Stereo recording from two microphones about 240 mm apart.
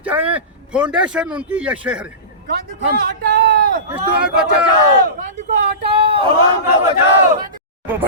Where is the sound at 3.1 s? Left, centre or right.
Right.